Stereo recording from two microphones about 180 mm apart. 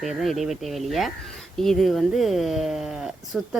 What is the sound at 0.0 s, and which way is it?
Speech, centre (ahead or behind).